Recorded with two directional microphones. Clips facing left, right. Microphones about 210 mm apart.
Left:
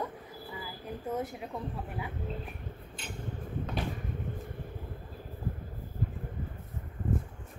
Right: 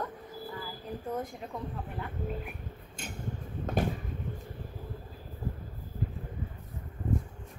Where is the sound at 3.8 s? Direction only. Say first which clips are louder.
Right 7 dB; 45° right (ahead or behind).